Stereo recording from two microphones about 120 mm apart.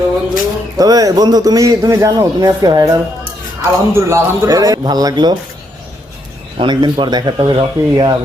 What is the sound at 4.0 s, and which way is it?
Speech, 20° right (ahead or behind).